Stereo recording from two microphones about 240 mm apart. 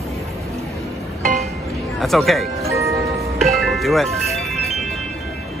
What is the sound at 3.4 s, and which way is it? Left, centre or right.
Music, centre.